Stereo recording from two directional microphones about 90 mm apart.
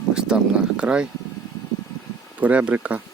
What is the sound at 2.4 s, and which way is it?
Speech, 15° right (ahead or behind).